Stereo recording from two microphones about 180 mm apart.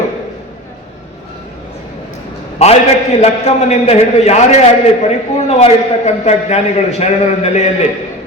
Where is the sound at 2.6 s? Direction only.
35° left (ahead or behind).